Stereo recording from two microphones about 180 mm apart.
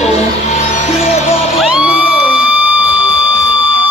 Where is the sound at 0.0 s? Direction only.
35° left (ahead or behind).